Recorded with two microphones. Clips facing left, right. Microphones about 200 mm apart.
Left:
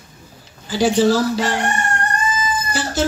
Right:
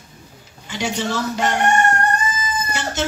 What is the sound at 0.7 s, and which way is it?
Speech, 35° left (ahead or behind).